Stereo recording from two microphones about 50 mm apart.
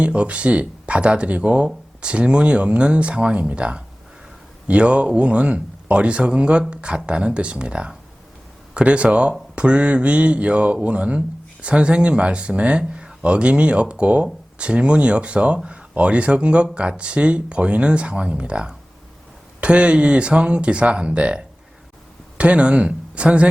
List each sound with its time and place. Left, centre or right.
0.0 s speech: right